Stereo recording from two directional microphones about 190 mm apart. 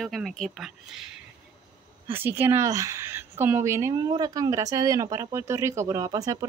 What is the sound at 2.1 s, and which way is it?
A woman's voice, 10° right (ahead or behind).